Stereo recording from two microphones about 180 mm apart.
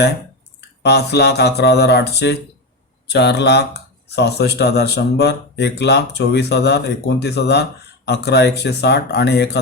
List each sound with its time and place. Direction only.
0.8 s speech: 70° left (ahead or behind)